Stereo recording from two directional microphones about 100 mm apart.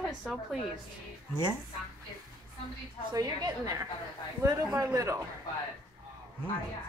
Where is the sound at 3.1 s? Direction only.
40° right (ahead or behind).